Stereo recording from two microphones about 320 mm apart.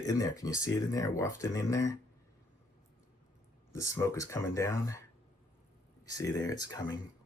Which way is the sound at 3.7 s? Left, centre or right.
Centre.